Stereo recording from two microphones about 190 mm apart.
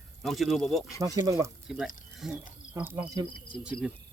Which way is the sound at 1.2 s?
15° right (ahead or behind).